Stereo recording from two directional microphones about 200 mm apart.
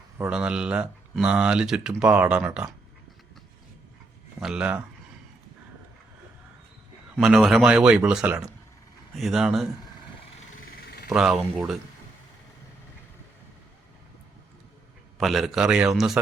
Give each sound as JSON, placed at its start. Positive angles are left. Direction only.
{"t": 0.2, "sound": "speech", "side_deg": -5}
{"t": 4.4, "sound": "speech", "side_deg": -5}
{"t": 7.2, "sound": "speech", "side_deg": 0}
{"t": 10.8, "sound": "a sound", "side_deg": 50}
{"t": 11.1, "sound": "speech", "side_deg": -5}
{"t": 15.2, "sound": "speech", "side_deg": 0}